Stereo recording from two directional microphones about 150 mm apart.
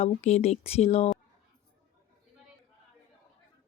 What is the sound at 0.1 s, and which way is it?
Speech, 50° left (ahead or behind).